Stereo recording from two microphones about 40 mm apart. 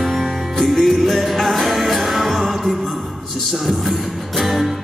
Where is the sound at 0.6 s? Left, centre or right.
Centre.